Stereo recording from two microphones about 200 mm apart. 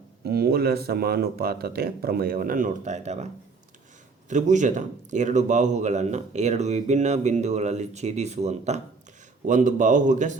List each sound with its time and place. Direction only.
0.3 s speech: 50° right (ahead or behind); by 3.2 s 35° right (ahead or behind)
4.3 s a man's voice: 35° right (ahead or behind)